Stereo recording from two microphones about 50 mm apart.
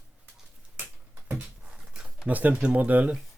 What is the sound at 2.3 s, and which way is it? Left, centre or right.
Speech, right.